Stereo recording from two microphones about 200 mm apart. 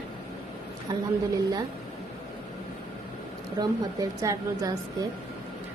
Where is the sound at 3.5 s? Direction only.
15° right (ahead or behind).